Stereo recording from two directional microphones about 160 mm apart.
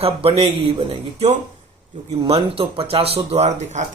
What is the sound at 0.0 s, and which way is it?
Speech, 35° right (ahead or behind).